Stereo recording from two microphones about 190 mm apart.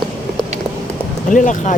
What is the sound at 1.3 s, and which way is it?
Speech, 40° left (ahead or behind).